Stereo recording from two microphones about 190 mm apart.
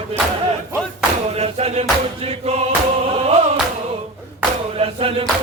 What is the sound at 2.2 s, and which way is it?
Choir, 35° right (ahead or behind).